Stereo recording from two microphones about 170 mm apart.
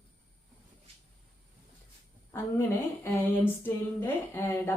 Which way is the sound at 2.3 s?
15° left (ahead or behind).